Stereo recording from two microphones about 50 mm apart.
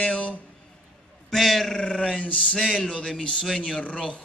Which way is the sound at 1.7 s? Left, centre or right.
Centre.